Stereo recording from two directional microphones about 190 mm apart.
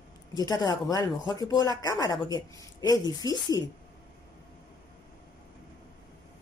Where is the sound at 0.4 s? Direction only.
20° left (ahead or behind).